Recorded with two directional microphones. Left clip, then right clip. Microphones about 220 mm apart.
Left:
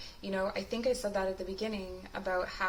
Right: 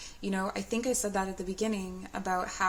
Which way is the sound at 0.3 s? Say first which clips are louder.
Even; 55° right (ahead or behind).